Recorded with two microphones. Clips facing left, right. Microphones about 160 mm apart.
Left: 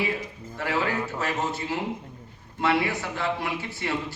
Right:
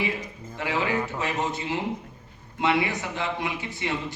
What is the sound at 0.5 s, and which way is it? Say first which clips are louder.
A man's voice: right 1 dB; 15° right (ahead or behind).